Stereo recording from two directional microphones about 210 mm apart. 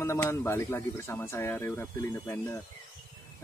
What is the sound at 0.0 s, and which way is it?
Speech, 15° left (ahead or behind).